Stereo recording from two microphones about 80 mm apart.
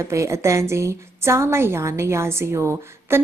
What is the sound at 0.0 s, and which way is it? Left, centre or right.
A woman's voice, right.